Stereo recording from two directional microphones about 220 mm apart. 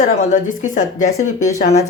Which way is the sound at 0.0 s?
35° left (ahead or behind).